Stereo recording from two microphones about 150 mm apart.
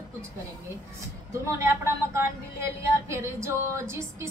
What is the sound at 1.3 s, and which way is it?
Speech, 20° right (ahead or behind).